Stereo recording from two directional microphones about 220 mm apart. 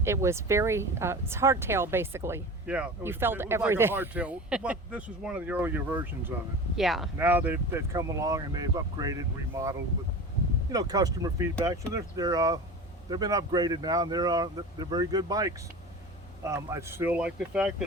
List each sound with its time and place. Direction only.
0.0 s speech: 10° right (ahead or behind)